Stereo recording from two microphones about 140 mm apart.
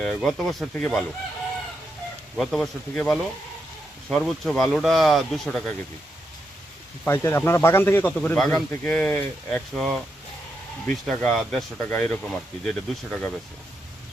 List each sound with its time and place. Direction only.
0.0 s speech: 5° left (ahead or behind)
2.3 s speech: centre (ahead or behind)
7.0 s speech: 15° left (ahead or behind)
10.8 s speech: centre (ahead or behind)